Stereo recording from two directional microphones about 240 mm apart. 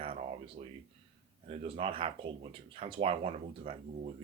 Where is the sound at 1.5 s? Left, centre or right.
Right.